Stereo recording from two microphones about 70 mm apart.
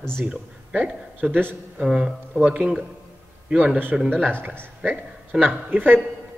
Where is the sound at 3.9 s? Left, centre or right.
Centre.